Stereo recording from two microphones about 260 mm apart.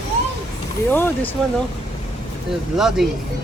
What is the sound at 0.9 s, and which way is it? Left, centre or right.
Speech, centre.